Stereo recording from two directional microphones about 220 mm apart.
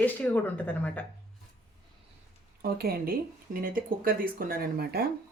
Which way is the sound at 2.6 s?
45° right (ahead or behind).